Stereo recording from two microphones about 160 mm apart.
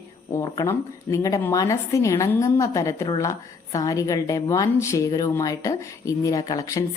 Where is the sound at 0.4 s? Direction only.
20° left (ahead or behind).